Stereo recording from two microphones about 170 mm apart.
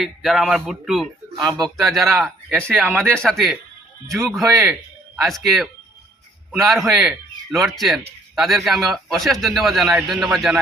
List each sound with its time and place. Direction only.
0.0 s a man's voice: centre (ahead or behind)
1.4 s a man's voice: 25° right (ahead or behind)
1.7 s a man's voice: centre (ahead or behind)
2.6 s speech: 10° right (ahead or behind)
3.2 s a man's voice: centre (ahead or behind)
6.7 s a man's voice: centre (ahead or behind)